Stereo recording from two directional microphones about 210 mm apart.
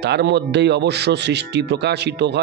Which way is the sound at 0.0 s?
55° right (ahead or behind).